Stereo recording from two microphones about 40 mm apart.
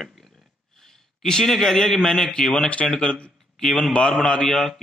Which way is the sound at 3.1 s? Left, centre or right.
Left.